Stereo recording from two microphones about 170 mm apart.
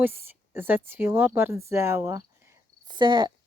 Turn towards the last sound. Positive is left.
turn(degrees=-25)  # may be behind; listen again after turning